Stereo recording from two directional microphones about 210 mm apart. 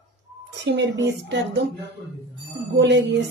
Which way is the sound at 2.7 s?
55° right (ahead or behind).